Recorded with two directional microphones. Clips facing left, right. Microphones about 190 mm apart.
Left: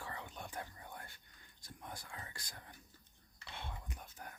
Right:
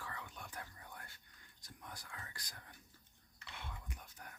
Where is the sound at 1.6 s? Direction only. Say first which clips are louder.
Left 3 dB; 25° left (ahead or behind).